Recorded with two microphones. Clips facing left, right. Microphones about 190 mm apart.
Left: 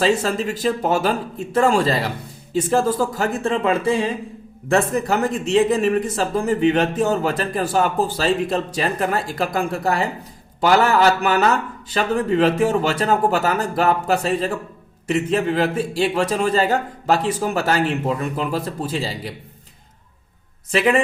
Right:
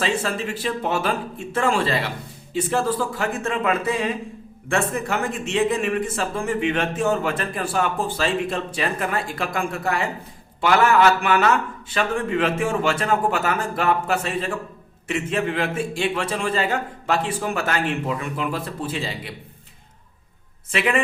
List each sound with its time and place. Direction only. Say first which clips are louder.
0.0 s speech: left 5 dB; 40° left (ahead or behind)